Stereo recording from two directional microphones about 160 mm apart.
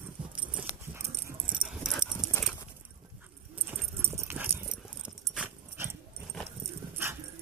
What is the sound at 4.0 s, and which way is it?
Dog, 15° right (ahead or behind).